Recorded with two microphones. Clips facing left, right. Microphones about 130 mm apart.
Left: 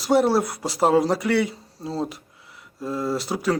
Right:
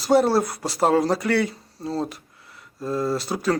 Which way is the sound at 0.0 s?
5° left (ahead or behind).